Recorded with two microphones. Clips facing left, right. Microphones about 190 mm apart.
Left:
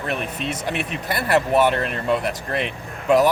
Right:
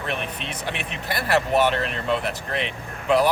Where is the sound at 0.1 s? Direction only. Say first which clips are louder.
Left 5 dB; 40° left (ahead or behind).